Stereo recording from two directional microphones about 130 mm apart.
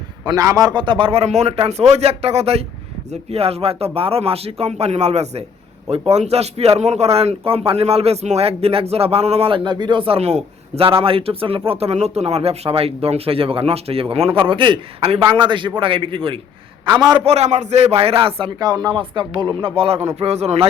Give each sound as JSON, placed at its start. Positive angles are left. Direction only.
{"t": 0.3, "sound": "a man's voice", "side_deg": -25}
{"t": 17.2, "sound": "a man's voice", "side_deg": -55}
{"t": 17.9, "sound": "a man's voice", "side_deg": -45}
{"t": 18.6, "sound": "a man's voice", "side_deg": -30}